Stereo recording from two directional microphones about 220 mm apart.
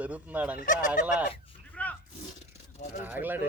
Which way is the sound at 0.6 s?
35° left (ahead or behind).